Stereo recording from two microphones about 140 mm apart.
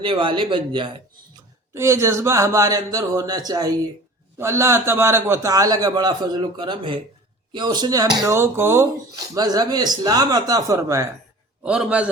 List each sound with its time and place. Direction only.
0.0 s speech: 35° right (ahead or behind)
1.7 s speech: 20° right (ahead or behind)
11.6 s a man's voice: 5° right (ahead or behind)